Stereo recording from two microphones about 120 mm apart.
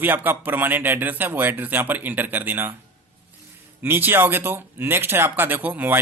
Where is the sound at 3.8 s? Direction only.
15° right (ahead or behind).